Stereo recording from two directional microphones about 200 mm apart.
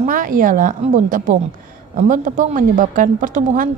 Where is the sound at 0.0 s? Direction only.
40° right (ahead or behind).